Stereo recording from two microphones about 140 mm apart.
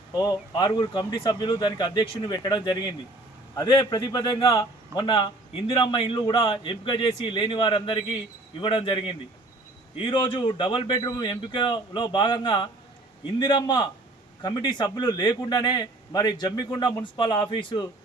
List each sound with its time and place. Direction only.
0.1 s a man's voice: 30° left (ahead or behind)